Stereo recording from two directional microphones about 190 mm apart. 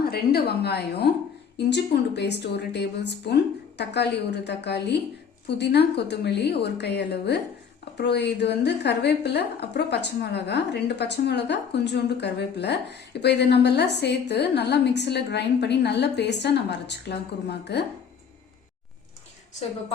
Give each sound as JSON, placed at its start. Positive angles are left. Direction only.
{"t": 0.0, "sound": "a woman's voice", "side_deg": 55}